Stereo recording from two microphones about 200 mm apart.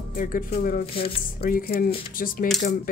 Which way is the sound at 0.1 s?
45° left (ahead or behind).